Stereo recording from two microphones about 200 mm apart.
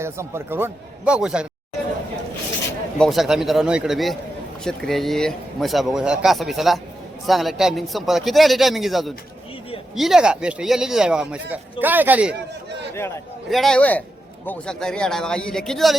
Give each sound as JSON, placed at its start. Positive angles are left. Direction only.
{"t": 0.0, "sound": "a man's voice", "side_deg": -15}
{"t": 3.0, "sound": "a man's voice", "side_deg": 0}
{"t": 12.9, "sound": "a man's voice", "side_deg": 15}
{"t": 13.5, "sound": "a man's voice", "side_deg": 0}